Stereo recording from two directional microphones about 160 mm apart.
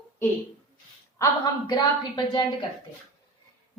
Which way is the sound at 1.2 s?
25° left (ahead or behind).